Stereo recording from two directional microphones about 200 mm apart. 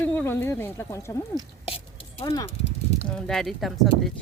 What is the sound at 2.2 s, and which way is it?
Speech, 15° left (ahead or behind).